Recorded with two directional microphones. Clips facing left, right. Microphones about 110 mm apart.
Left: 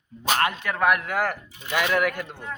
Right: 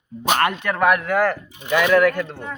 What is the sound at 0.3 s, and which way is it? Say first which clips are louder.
Speech: right 4 dB; 60° right (ahead or behind).